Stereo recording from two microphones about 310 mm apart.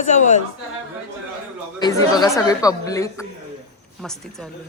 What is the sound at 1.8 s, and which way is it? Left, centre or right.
Speech, centre.